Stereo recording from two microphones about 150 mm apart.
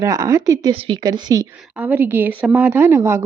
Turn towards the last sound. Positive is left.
turn(degrees=-20)  # may be behind; listen again after turning